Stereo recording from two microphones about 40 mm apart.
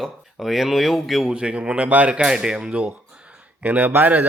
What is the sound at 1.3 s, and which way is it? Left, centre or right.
Speech, right.